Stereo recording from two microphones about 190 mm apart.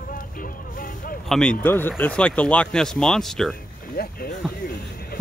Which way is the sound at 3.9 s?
50° left (ahead or behind).